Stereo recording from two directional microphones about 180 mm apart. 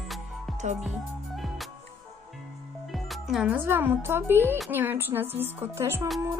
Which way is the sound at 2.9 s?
Centre (ahead or behind).